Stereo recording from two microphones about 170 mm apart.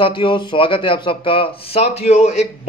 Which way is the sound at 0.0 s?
30° left (ahead or behind).